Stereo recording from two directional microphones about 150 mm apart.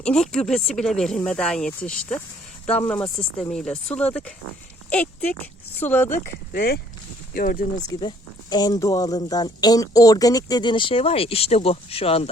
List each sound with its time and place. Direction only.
0.0 s speech: 5° left (ahead or behind)
6.5 s speech: 90° left
7.3 s speech: 65° left (ahead or behind)
7.9 s speech: 30° left (ahead or behind)